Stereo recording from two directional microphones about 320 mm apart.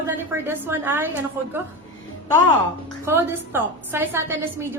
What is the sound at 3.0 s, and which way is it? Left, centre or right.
A woman's voice, centre.